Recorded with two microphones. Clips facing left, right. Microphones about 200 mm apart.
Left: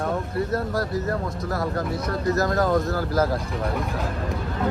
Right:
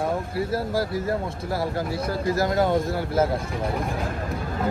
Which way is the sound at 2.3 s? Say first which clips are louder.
Even; 25° right (ahead or behind).